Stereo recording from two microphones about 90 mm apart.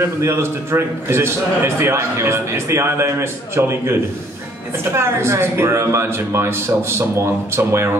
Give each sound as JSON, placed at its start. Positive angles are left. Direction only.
{"t": 0.0, "sound": "a man's voice", "side_deg": -30}